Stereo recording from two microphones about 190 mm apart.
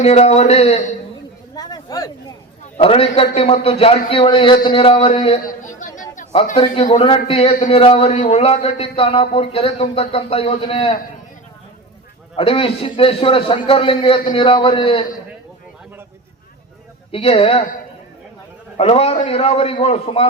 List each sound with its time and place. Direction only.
0.0 s a man's voice: 35° left (ahead or behind)
1.5 s a sound: 20° left (ahead or behind)
2.7 s a man's voice: 30° left (ahead or behind)
5.5 s music: 40° left (ahead or behind)
6.3 s a man's voice: 35° left (ahead or behind)
12.4 s a man's voice: 30° left (ahead or behind)
17.1 s a man's voice: 30° left (ahead or behind)
18.8 s a man's voice: 30° left (ahead or behind)